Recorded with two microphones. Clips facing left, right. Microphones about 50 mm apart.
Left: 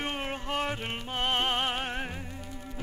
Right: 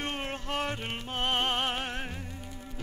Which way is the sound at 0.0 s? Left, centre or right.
Centre.